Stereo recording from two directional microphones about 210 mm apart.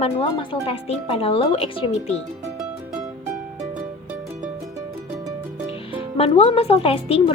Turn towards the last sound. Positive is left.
turn(degrees=25)  # may be behind; listen again after turning